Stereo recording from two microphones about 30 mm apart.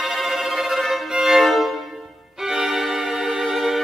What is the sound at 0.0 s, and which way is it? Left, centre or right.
Music, centre.